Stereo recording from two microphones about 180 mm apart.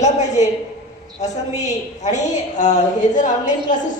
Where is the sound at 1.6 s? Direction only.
40° left (ahead or behind).